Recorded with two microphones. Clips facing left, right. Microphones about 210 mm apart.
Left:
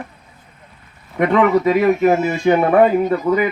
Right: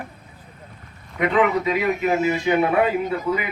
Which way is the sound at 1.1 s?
50° left (ahead or behind).